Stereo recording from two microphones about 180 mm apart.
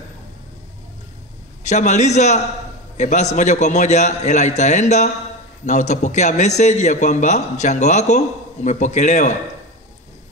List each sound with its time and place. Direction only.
1.6 s a man's voice: 40° left (ahead or behind)